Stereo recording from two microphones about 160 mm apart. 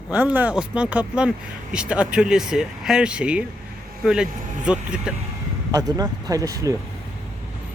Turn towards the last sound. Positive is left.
turn(degrees=-20)  # may be behind; listen again after turning